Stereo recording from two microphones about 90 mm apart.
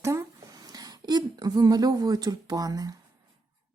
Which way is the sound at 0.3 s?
45° right (ahead or behind).